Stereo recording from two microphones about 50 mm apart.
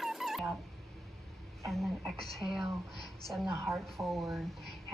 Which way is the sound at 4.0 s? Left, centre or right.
Right.